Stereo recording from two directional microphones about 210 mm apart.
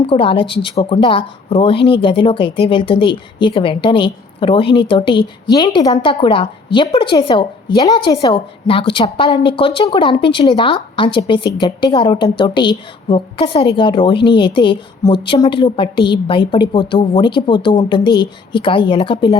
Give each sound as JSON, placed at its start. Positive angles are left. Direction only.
{"t": 0.0, "sound": "a woman's voice", "side_deg": 25}